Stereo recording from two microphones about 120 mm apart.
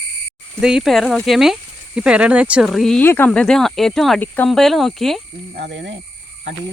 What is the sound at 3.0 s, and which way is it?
Speech, 20° left (ahead or behind).